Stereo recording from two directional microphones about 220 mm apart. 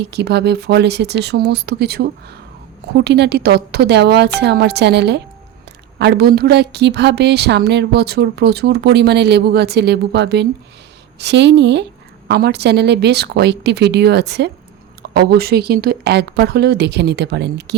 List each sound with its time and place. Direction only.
0.0 s a woman's voice: 50° right (ahead or behind)